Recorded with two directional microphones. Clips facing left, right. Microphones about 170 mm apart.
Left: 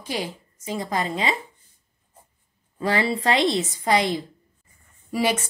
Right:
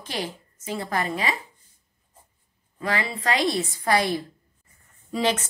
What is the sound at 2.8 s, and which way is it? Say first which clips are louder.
A woman's voice: left 5 dB; 30° left (ahead or behind).